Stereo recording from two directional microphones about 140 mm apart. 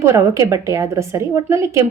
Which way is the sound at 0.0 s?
20° right (ahead or behind).